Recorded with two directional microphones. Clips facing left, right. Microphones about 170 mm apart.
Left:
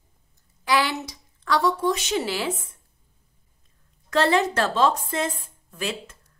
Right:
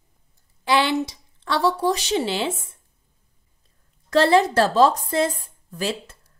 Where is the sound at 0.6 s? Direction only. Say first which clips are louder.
Right 3 dB; 25° right (ahead or behind).